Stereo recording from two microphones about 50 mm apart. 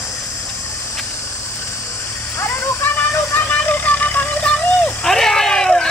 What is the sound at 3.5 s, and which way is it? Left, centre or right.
Vehicle, left.